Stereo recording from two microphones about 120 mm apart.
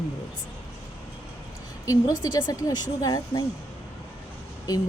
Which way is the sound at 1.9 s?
30° left (ahead or behind).